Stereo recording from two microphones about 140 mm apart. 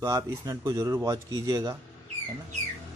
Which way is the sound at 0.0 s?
25° right (ahead or behind).